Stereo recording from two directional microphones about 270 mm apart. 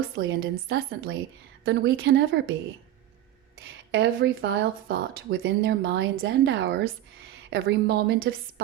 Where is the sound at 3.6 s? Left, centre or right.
Right.